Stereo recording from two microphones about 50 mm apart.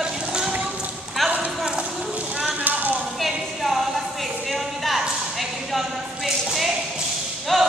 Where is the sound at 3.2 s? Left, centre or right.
Centre.